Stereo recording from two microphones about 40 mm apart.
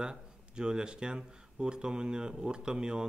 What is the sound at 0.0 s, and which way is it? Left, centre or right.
Speech, right.